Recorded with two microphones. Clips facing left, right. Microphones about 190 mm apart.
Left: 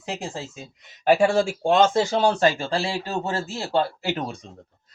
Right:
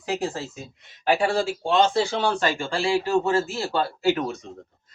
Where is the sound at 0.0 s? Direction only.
20° left (ahead or behind).